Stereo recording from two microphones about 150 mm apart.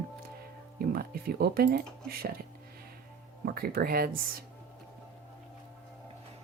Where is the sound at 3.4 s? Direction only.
85° right.